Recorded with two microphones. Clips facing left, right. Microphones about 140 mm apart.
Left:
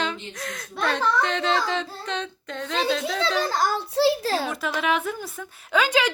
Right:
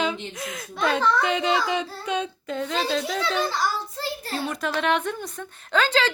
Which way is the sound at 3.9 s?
90° left.